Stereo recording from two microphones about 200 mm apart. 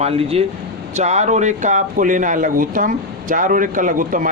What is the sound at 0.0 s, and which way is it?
Speech, 30° right (ahead or behind).